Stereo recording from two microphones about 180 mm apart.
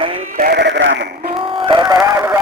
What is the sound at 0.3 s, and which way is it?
Sheep, 60° right (ahead or behind).